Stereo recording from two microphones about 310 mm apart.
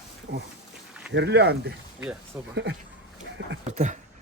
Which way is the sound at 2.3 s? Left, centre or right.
Centre.